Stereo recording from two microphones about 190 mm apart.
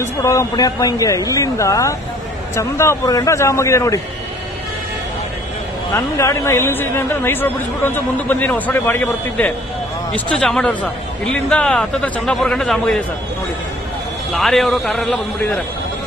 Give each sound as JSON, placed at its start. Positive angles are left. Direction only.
{"t": 0.0, "sound": "a man's voice", "side_deg": 15}
{"t": 5.9, "sound": "a man's voice", "side_deg": 15}
{"t": 14.3, "sound": "a man's voice", "side_deg": 0}